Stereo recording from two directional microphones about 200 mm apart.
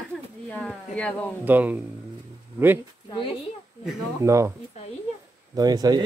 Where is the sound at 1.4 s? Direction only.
10° right (ahead or behind).